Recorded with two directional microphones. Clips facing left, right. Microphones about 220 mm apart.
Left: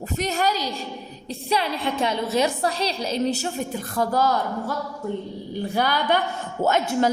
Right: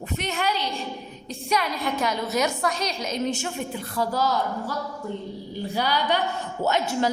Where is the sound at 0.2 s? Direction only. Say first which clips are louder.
Left 4 dB; 40° left (ahead or behind).